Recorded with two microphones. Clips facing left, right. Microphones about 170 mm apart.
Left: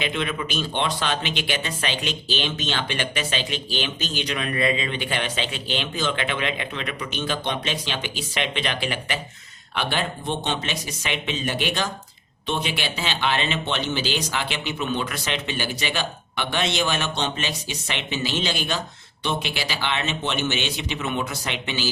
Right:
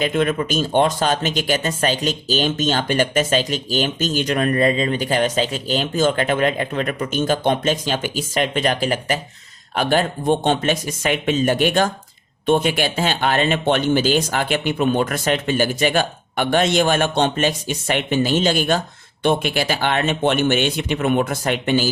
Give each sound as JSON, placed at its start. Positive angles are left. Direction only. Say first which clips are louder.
{"t": 0.0, "sound": "speech", "louder": "right 8 dB", "side_deg": -45}